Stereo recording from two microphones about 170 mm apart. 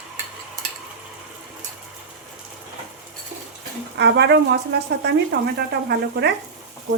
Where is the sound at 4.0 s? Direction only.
80° right.